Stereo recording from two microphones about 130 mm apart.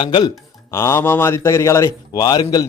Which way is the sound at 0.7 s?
20° left (ahead or behind).